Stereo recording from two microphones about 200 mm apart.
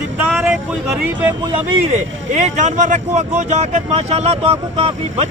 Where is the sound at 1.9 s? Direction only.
35° right (ahead or behind).